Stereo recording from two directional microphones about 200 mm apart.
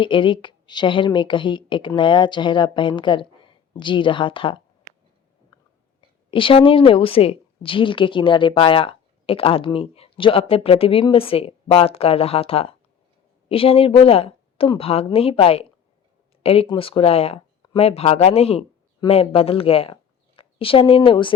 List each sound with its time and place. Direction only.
0.0 s a woman's voice: 25° left (ahead or behind)
6.3 s a woman's voice: 25° left (ahead or behind)